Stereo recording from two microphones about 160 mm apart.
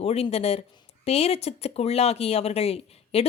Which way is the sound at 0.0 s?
40° left (ahead or behind).